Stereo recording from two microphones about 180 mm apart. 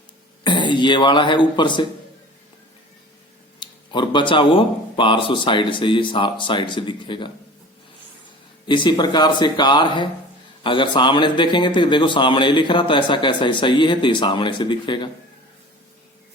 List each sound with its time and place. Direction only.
0.4 s speech: 25° left (ahead or behind)
3.6 s speech: 25° left (ahead or behind)
8.6 s speech: 25° left (ahead or behind)